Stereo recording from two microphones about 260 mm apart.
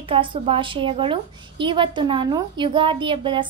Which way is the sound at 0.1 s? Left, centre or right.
Centre.